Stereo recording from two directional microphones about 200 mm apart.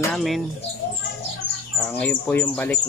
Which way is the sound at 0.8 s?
55° left (ahead or behind).